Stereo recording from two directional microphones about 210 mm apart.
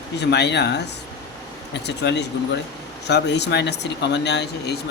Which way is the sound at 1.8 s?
55° left (ahead or behind).